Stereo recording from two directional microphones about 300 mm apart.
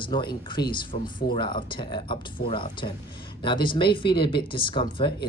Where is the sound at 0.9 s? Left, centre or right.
Left.